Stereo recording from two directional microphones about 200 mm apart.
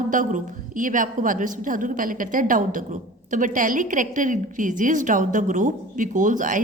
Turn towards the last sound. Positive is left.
turn(degrees=-40)  # may be behind; listen again after turning